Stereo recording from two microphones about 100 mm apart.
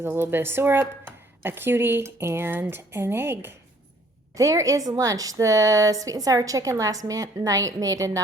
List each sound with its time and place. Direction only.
0.0 s a woman's voice: 20° right (ahead or behind)